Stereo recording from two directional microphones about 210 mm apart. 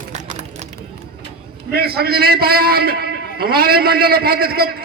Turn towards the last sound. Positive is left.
turn(degrees=-45)  # may be behind; listen again after turning